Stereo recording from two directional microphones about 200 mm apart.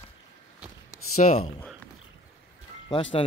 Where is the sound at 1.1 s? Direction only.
35° left (ahead or behind).